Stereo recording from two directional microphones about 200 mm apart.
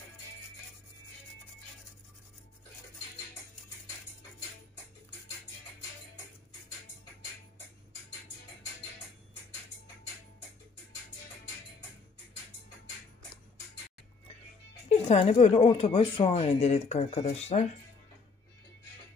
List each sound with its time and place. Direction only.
15.0 s speech: 30° left (ahead or behind)